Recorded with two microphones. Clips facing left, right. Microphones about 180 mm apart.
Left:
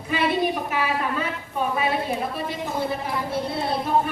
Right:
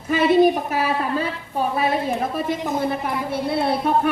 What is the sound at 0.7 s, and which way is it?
Speech, 35° right (ahead or behind).